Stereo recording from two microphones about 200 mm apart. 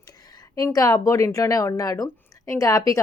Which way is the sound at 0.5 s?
15° left (ahead or behind).